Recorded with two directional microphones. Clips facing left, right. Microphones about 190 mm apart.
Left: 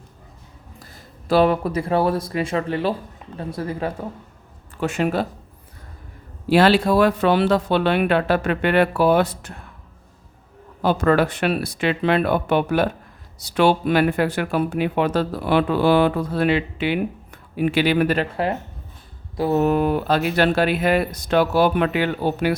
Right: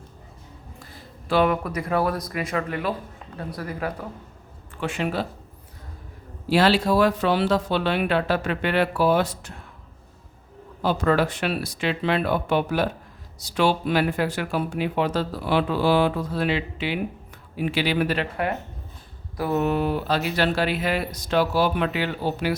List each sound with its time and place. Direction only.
1.3 s speech: 35° left (ahead or behind)
4.7 s speech: 45° left (ahead or behind)
6.5 s speech: 55° left (ahead or behind)
10.8 s speech: 55° left (ahead or behind)
19.4 s speech: 25° left (ahead or behind)
19.6 s speech: 45° left (ahead or behind)